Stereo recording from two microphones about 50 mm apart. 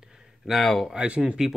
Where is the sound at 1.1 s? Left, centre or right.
Right.